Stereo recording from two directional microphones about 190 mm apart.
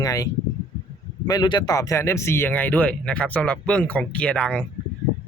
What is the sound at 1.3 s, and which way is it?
Speech, 20° left (ahead or behind).